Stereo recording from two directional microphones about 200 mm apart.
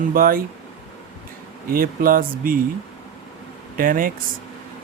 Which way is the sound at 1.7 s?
45° right (ahead or behind).